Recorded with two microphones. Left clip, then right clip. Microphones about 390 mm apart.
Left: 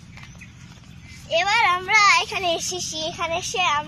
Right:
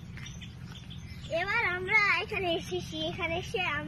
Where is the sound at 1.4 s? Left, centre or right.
Centre.